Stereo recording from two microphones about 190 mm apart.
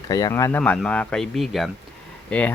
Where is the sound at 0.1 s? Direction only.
20° left (ahead or behind).